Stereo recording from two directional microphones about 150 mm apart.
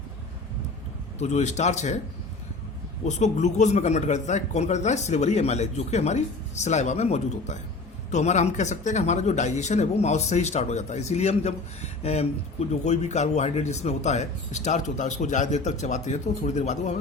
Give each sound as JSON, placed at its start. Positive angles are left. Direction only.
{"t": 1.2, "sound": "speech", "side_deg": 50}
{"t": 3.1, "sound": "speech", "side_deg": 50}